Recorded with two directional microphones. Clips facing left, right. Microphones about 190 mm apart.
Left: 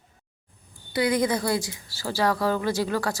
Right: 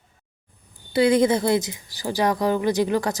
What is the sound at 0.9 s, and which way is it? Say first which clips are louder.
A woman's voice: right 6 dB; 25° right (ahead or behind).